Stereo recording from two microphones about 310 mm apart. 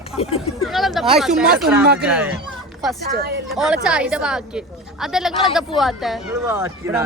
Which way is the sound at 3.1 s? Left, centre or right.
Right.